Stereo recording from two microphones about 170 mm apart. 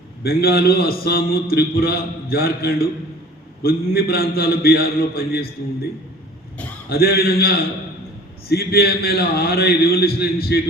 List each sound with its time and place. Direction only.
0.2 s a man's voice: 65° left (ahead or behind)
6.9 s a man's voice: 65° left (ahead or behind)